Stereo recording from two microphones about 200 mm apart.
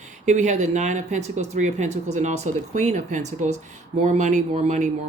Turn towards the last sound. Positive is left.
turn(degrees=-35)  # may be behind; listen again after turning